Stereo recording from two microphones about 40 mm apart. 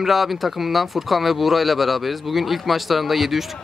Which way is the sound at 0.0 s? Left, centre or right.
Centre.